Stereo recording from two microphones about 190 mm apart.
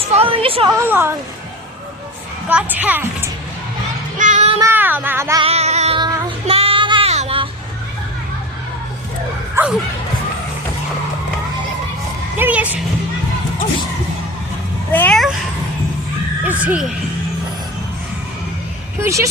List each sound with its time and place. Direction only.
0.1 s a woman's voice: 30° right (ahead or behind)
0.9 s speech: 10° right (ahead or behind)
2.5 s speech: 5° right (ahead or behind)
4.2 s child singing: 40° right (ahead or behind)
4.7 s speech: 10° right (ahead or behind)
5.4 s a sound: 35° right (ahead or behind)
6.0 s child singing: 20° right (ahead or behind)
9.6 s speech: 10° right (ahead or behind)
12.4 s speech: 10° right (ahead or behind)
14.9 s a sound: 5° left (ahead or behind)
16.5 s speech: 10° right (ahead or behind)
18.9 s speech: 15° right (ahead or behind)